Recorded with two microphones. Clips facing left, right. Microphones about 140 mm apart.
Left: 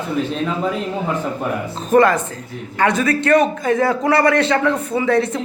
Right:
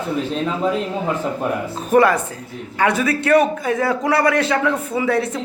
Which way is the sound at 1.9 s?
10° right (ahead or behind).